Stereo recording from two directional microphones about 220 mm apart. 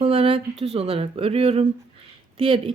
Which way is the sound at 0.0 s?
25° right (ahead or behind).